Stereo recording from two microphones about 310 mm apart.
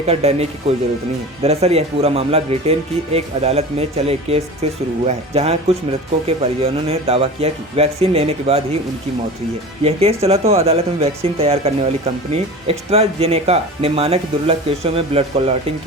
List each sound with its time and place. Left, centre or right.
0.0 s speech: centre
9.8 s speech: centre